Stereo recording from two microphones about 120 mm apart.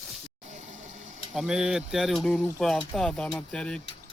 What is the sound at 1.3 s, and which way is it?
Speech, 5° right (ahead or behind).